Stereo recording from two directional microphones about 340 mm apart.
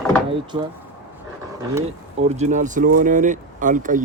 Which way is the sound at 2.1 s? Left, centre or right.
Centre.